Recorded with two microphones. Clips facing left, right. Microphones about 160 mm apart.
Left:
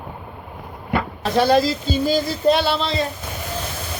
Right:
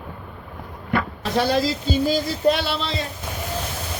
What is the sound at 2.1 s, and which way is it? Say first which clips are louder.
Speech: left 4 dB; 30° left (ahead or behind).